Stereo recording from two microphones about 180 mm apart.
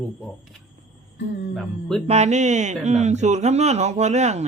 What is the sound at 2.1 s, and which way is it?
Speech, 40° right (ahead or behind).